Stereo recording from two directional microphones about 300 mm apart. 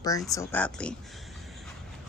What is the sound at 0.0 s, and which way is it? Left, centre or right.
Speech, centre.